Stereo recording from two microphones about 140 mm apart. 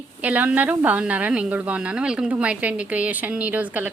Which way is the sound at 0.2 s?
10° right (ahead or behind).